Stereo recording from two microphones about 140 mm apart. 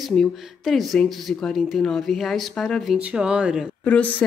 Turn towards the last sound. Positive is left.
turn(degrees=10)  # may be behind; listen again after turning